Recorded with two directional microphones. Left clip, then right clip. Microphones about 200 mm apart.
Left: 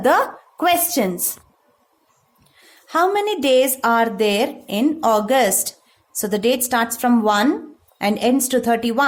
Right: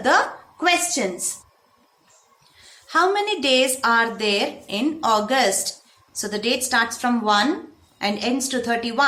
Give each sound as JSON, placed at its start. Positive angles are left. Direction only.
{"t": 0.0, "sound": "a woman's voice", "side_deg": 50}
{"t": 2.6, "sound": "a woman's voice", "side_deg": 50}